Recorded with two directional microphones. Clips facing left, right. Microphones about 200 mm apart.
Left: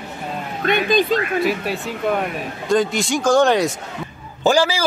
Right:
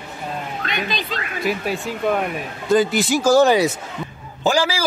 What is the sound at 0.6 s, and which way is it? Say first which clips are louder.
Speech: left 13 dB; 50° left (ahead or behind).